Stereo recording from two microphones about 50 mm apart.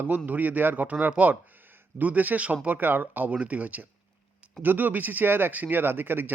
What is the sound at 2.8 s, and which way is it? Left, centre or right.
Speech, right.